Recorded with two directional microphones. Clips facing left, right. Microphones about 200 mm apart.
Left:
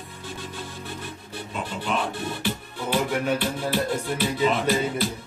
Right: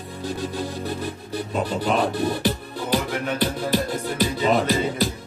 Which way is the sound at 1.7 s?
40° right (ahead or behind).